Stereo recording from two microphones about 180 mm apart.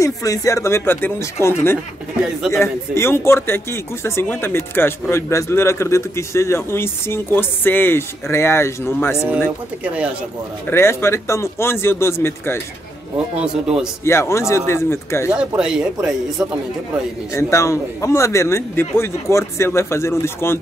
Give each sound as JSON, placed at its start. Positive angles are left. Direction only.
{"t": 0.0, "sound": "speech", "side_deg": 20}
{"t": 2.2, "sound": "speech", "side_deg": 0}
{"t": 2.6, "sound": "speech", "side_deg": 15}
{"t": 10.7, "sound": "speech", "side_deg": 15}
{"t": 14.0, "sound": "speech", "side_deg": 15}
{"t": 15.3, "sound": "speech", "side_deg": -5}
{"t": 17.3, "sound": "speech", "side_deg": 15}